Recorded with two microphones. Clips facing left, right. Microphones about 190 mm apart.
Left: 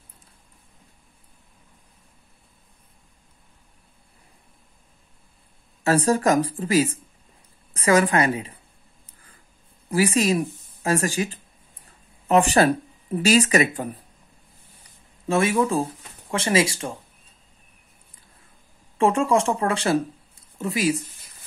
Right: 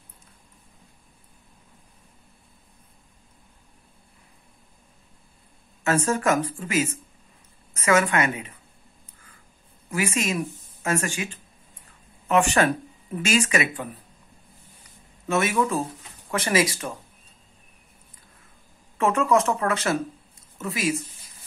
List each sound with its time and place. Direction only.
5.9 s a woman's voice: 35° left (ahead or behind)
9.8 s speech: 35° left (ahead or behind)
14.8 s a sound: 30° left (ahead or behind)
16.3 s speech: 30° left (ahead or behind)
18.9 s speech: 30° left (ahead or behind)